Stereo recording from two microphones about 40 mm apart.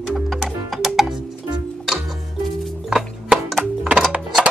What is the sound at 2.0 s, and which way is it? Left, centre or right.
Music, centre.